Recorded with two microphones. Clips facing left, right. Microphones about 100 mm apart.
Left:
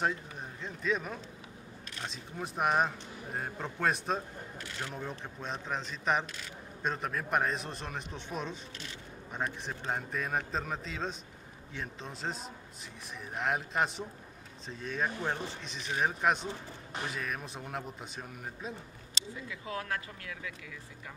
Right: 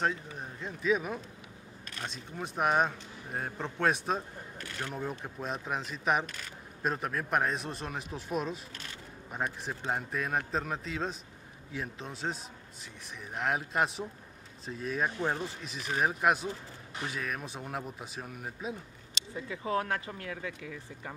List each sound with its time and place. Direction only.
0.0 s a man's voice: centre (ahead or behind)
6.2 s speech: 50° right (ahead or behind)
6.8 s a man's voice: 5° right (ahead or behind)
19.3 s speech: 35° right (ahead or behind)